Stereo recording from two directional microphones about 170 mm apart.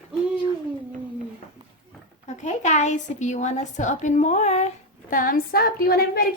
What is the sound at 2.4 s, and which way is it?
A woman's voice, 45° left (ahead or behind).